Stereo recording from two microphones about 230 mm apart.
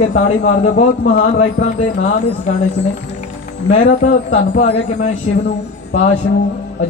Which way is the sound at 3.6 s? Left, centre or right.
Left.